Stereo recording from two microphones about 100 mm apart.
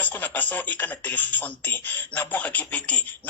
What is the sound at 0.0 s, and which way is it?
Speech, 15° left (ahead or behind).